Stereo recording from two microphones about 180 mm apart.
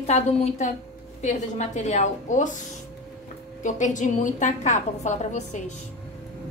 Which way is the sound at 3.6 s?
45° left (ahead or behind).